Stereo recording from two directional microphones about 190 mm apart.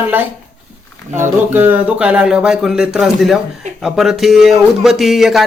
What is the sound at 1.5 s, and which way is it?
Speech, 10° right (ahead or behind).